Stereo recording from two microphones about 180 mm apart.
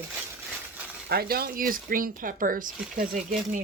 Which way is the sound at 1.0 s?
60° right (ahead or behind).